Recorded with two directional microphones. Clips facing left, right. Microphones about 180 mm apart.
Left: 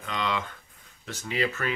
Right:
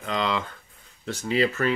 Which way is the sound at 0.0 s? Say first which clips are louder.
Right 4 dB; 35° right (ahead or behind).